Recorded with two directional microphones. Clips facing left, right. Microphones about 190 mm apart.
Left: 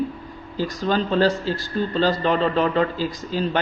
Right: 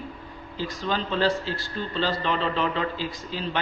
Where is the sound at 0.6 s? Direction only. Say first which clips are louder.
Left 6 dB; 45° left (ahead or behind).